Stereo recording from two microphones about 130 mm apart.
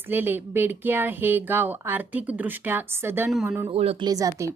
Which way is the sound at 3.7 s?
45° right (ahead or behind).